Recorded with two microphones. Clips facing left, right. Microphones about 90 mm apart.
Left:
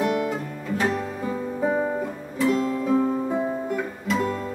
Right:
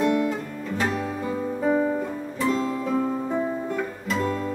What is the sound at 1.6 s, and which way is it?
Guitar, 15° left (ahead or behind).